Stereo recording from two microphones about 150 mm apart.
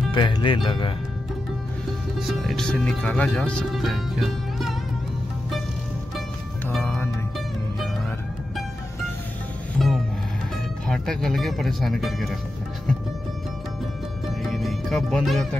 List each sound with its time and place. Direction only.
0.1 s speech: 35° left (ahead or behind)
2.1 s speech: centre (ahead or behind)
6.8 s music: 15° left (ahead or behind)
9.8 s music: centre (ahead or behind)
10.9 s speech: 5° left (ahead or behind)
14.4 s music: centre (ahead or behind)